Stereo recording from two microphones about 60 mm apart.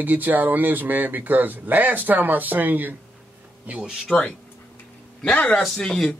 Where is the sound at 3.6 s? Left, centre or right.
Centre.